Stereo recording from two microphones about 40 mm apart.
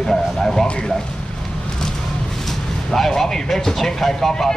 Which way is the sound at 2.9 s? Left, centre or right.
Centre.